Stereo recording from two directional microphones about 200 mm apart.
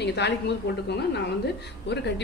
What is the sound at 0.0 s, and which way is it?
A woman's voice, 60° left (ahead or behind).